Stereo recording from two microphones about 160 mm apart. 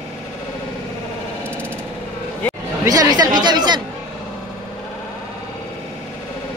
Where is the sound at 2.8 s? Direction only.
25° right (ahead or behind).